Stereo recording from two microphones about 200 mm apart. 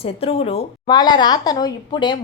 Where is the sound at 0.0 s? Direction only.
30° left (ahead or behind).